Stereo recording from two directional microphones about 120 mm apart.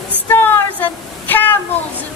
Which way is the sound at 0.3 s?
15° left (ahead or behind).